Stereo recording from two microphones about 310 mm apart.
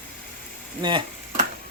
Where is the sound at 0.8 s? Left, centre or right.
Centre.